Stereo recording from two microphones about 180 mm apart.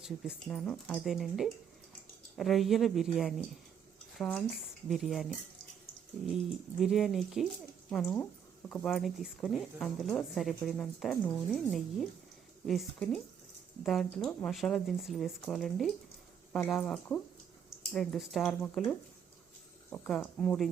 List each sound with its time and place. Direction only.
0.0 s speech: centre (ahead or behind)
19.9 s speech: 5° left (ahead or behind)